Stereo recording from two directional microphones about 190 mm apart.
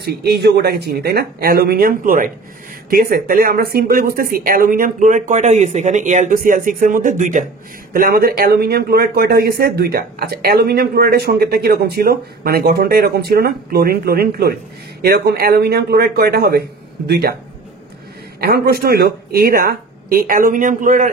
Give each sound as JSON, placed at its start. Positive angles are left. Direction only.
{"t": 0.0, "sound": "speech", "side_deg": -60}
{"t": 18.4, "sound": "speech", "side_deg": -55}